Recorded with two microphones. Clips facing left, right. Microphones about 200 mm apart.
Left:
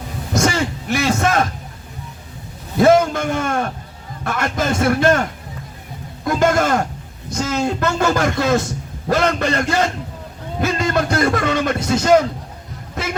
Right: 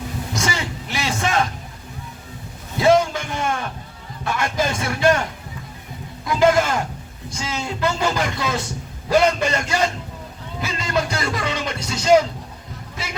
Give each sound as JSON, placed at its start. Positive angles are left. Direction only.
{"t": 0.3, "sound": "a man's voice", "side_deg": 50}
{"t": 3.0, "sound": "a man's voice", "side_deg": 50}
{"t": 6.2, "sound": "a man's voice", "side_deg": 50}